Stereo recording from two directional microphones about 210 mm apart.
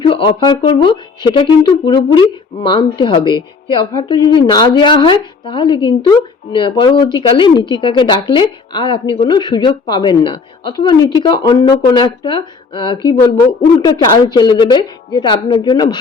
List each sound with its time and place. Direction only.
0.0 s speech: 25° left (ahead or behind)